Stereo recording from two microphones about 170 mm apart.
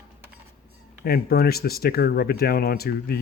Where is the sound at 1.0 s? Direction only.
65° left (ahead or behind).